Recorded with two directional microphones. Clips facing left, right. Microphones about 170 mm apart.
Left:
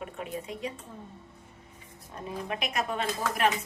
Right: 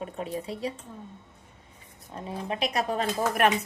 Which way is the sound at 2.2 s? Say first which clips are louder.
Right 3 dB; 30° right (ahead or behind).